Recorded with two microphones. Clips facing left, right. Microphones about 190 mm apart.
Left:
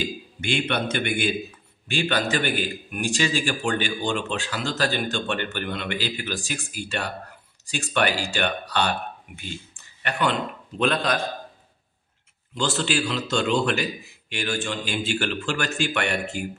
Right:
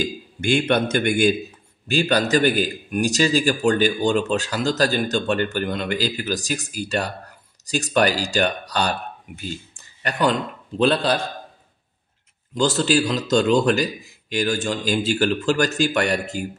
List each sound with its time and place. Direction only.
0.0 s a man's voice: 45° right (ahead or behind)
12.5 s a man's voice: 40° right (ahead or behind)